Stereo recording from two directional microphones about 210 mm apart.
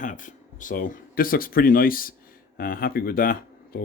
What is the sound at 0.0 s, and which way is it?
Speech, 40° left (ahead or behind).